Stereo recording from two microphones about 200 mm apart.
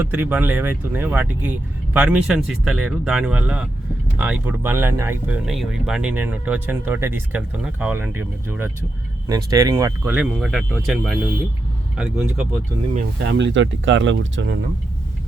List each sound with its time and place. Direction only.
0.0 s speech: 10° right (ahead or behind)
5.5 s speech: centre (ahead or behind)
13.1 s speech: 60° right (ahead or behind)